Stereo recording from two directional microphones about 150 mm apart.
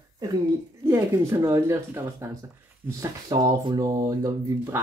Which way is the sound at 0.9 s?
20° right (ahead or behind).